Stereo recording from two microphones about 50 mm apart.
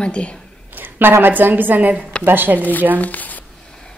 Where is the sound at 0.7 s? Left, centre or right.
Right.